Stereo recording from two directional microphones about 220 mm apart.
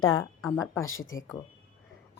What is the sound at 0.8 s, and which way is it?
Speech, 65° left (ahead or behind).